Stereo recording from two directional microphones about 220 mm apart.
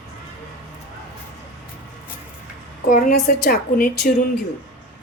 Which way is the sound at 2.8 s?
35° left (ahead or behind).